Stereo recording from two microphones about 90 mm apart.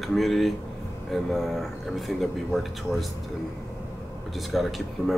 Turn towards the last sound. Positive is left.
turn(degrees=0)  # may be behind; listen again after turning